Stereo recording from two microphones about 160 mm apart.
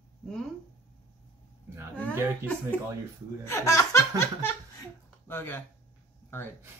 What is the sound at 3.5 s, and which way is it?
Speech, 20° left (ahead or behind).